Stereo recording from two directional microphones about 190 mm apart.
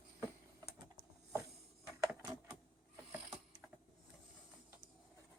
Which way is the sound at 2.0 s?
15° right (ahead or behind).